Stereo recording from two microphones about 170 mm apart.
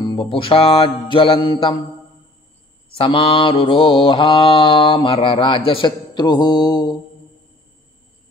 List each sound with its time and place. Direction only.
0.0 s music: 30° left (ahead or behind)
3.0 s mantra: 30° left (ahead or behind)